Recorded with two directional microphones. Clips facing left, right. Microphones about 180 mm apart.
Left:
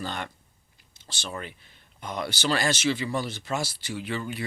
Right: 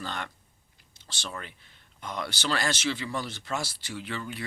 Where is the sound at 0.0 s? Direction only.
10° left (ahead or behind).